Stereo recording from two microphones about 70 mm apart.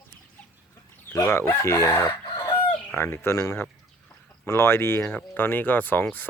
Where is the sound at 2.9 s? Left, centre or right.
Left.